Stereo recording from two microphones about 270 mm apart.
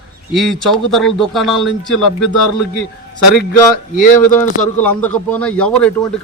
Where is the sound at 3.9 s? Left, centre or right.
Left.